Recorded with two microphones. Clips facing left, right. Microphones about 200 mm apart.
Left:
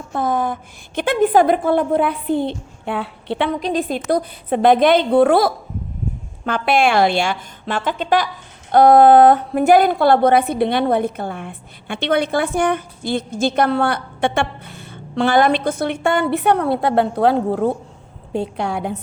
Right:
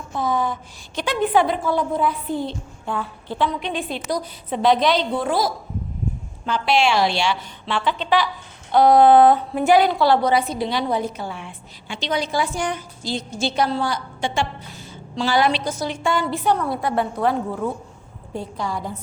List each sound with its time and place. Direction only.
0.1 s a woman's voice: 55° left (ahead or behind)
3.6 s a woman's voice: 40° left (ahead or behind); by 18.9 s 65° left (ahead or behind)